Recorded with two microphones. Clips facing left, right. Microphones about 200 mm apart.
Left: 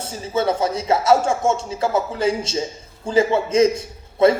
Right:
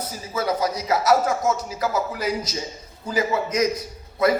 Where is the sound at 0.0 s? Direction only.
25° left (ahead or behind).